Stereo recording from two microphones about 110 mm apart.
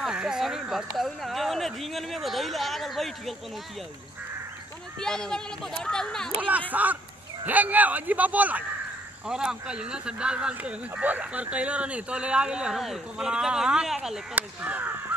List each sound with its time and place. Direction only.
0.0 s speech: 5° right (ahead or behind)
5.0 s speech: 5° left (ahead or behind)
6.7 s speech: 15° right (ahead or behind)
14.3 s speech: 15° right (ahead or behind)